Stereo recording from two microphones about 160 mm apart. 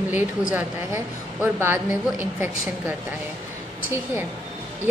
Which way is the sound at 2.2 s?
10° right (ahead or behind).